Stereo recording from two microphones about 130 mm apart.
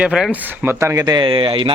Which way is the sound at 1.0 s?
35° right (ahead or behind).